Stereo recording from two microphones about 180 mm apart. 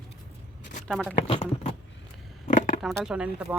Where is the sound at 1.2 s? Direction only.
35° left (ahead or behind).